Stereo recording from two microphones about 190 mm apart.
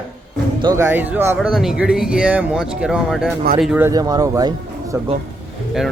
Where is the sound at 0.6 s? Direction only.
20° right (ahead or behind).